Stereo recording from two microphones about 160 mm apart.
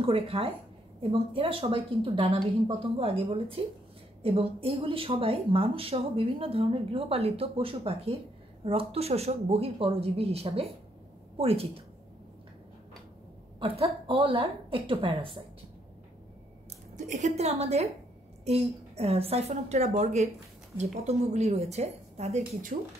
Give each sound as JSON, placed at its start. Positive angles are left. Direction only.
{"t": 0.0, "sound": "speech", "side_deg": -35}
{"t": 13.6, "sound": "a woman's voice", "side_deg": -35}
{"t": 16.9, "sound": "a woman's voice", "side_deg": -50}